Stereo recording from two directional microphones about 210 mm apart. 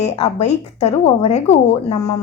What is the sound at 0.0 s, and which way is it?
Speech, 30° left (ahead or behind).